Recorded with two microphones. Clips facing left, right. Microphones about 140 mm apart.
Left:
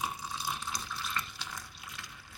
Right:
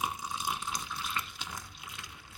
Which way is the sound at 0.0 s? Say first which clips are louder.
Right 2 dB; 20° right (ahead or behind).